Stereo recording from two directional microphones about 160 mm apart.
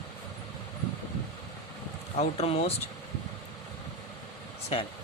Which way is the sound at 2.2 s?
40° left (ahead or behind).